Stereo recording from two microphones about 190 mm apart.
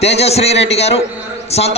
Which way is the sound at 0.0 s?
35° left (ahead or behind).